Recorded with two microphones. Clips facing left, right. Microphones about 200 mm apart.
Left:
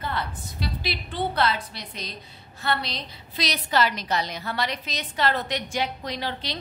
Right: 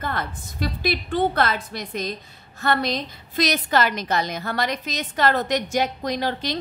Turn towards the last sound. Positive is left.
turn(degrees=-45)  # may be behind; listen again after turning